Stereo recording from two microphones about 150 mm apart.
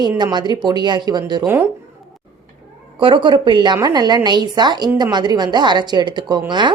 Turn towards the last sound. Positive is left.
turn(degrees=-30)  # may be behind; listen again after turning